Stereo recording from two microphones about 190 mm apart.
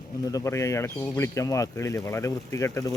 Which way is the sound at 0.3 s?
15° left (ahead or behind).